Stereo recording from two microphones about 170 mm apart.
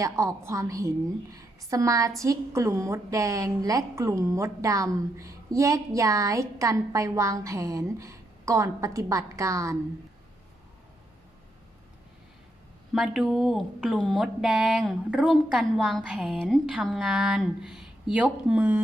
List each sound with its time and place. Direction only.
0.0 s a woman's voice: 20° right (ahead or behind)
12.9 s speech: centre (ahead or behind)